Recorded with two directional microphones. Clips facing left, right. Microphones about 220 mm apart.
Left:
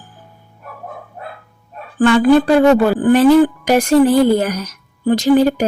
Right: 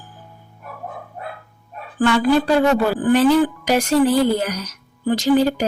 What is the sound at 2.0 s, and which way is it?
Speech, 50° left (ahead or behind).